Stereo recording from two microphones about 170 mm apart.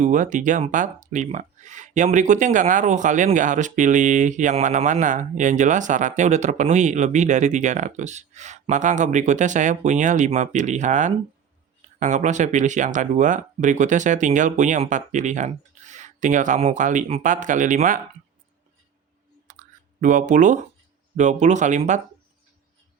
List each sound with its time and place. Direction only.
0.0 s speech: 45° right (ahead or behind)
19.5 s a sound: 50° right (ahead or behind)
21.2 s speech: 45° right (ahead or behind)